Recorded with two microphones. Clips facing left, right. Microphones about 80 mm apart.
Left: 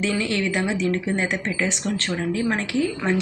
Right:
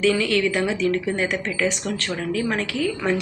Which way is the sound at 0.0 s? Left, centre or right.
Left.